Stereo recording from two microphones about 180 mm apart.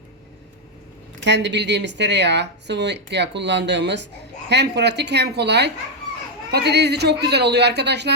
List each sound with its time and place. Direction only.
1.2 s speech: 75° right (ahead or behind)